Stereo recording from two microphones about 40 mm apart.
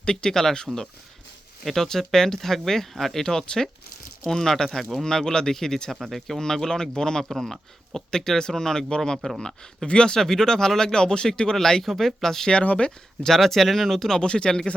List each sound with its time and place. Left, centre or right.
0.0 s speech: centre
3.2 s speech: centre
5.0 s speech: centre
7.3 s speech: centre
9.2 s speech: left
10.2 s speech: centre
12.6 s speech: left
13.2 s speech: centre
14.2 s speech: left